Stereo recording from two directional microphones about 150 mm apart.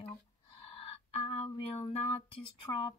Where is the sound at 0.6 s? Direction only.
40° left (ahead or behind).